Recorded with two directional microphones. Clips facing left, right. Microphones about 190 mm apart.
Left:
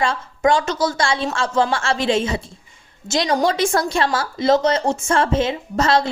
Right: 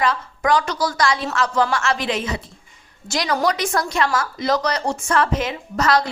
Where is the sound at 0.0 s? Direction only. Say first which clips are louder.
Left 3 dB; 25° left (ahead or behind).